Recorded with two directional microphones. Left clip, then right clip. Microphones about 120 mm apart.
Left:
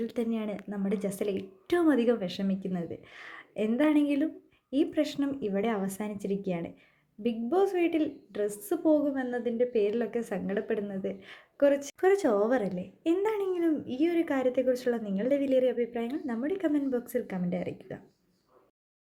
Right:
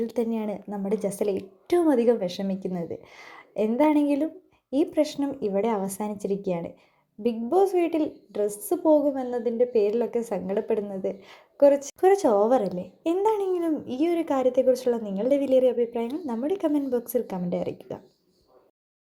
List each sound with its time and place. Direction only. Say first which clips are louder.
0.0 s a woman's voice: right 5 dB; 15° right (ahead or behind)